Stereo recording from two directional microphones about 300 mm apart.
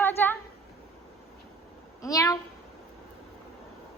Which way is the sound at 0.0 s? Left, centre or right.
Centre.